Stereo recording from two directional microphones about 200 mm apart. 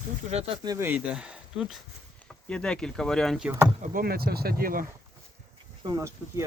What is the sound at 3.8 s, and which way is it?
Speech, 45° right (ahead or behind).